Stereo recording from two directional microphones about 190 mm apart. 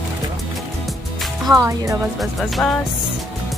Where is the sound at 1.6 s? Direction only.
15° right (ahead or behind).